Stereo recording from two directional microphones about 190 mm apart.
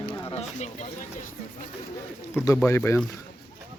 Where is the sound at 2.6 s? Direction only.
15° left (ahead or behind).